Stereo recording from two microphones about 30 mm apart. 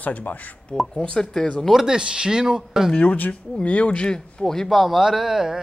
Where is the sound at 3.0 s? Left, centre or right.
Left.